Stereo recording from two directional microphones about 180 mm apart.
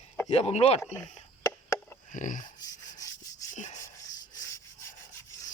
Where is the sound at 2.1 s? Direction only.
45° left (ahead or behind).